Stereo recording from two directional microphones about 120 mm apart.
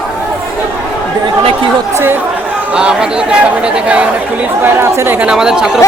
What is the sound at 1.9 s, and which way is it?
Speech, 20° right (ahead or behind).